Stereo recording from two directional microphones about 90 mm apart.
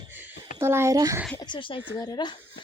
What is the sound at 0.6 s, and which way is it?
Speech, 30° right (ahead or behind).